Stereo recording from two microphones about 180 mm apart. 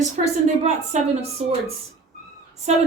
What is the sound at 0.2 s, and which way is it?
A woman's voice, 40° right (ahead or behind).